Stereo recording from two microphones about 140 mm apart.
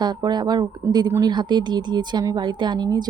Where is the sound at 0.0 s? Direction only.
30° right (ahead or behind).